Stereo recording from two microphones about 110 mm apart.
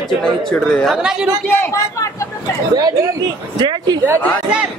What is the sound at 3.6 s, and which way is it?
Speech, 40° right (ahead or behind).